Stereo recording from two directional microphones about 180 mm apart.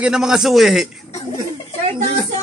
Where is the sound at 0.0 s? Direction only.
5° right (ahead or behind).